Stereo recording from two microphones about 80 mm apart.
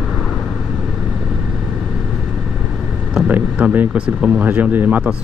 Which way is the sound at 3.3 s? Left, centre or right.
Right.